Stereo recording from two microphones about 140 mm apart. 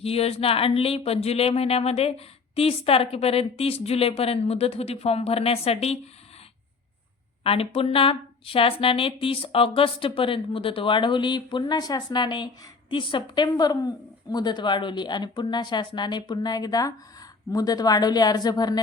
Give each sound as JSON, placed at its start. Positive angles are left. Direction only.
{"t": 0.0, "sound": "speech", "side_deg": 45}
{"t": 7.4, "sound": "speech", "side_deg": 45}